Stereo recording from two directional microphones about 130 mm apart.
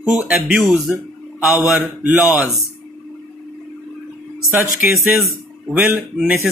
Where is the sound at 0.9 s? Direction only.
5° right (ahead or behind).